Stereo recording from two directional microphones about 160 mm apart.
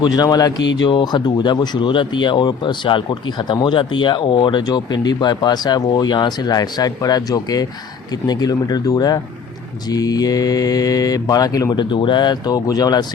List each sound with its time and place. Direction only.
0.0 s speech: 25° left (ahead or behind)